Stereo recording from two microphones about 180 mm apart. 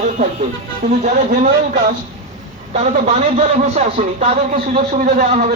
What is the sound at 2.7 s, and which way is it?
Speech, 40° right (ahead or behind).